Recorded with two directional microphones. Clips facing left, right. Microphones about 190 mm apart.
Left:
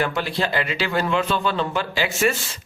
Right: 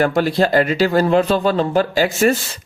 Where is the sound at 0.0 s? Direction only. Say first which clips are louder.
Right 8 dB; 40° right (ahead or behind).